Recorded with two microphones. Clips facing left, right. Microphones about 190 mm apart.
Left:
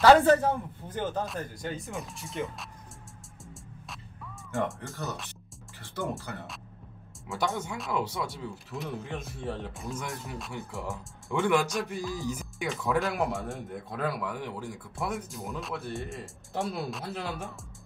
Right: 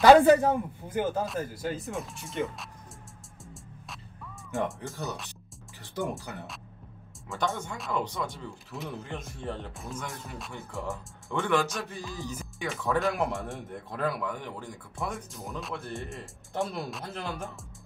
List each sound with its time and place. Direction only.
0.0 s a man's voice: 15° right (ahead or behind)
5.8 s speech: 15° right (ahead or behind)
7.2 s a man's voice: 5° left (ahead or behind)